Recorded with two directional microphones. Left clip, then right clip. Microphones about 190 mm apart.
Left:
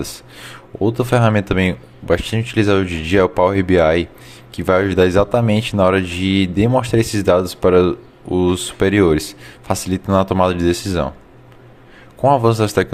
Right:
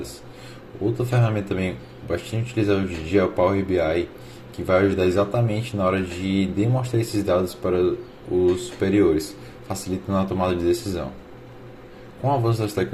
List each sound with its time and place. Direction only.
0.9 s speech: 55° left (ahead or behind)
12.2 s speech: 60° left (ahead or behind)